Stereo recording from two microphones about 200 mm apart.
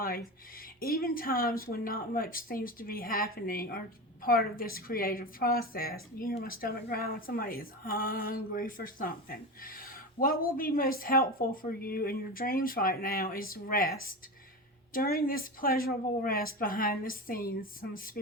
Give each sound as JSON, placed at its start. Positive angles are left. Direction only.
{"t": 0.8, "sound": "speech", "side_deg": 50}